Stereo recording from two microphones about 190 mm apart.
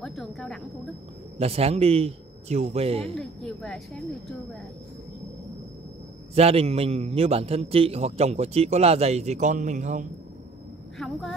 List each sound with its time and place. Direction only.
0.0 s a sound: centre (ahead or behind)
1.4 s a man's voice: 30° right (ahead or behind)
3.2 s speech: centre (ahead or behind)
6.3 s a man's voice: 30° right (ahead or behind)
11.0 s speech: centre (ahead or behind)